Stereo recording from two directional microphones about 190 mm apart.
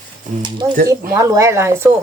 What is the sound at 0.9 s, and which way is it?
Speech, 15° right (ahead or behind).